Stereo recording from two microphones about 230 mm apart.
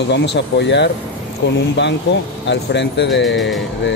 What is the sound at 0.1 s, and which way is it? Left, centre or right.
Speech, left.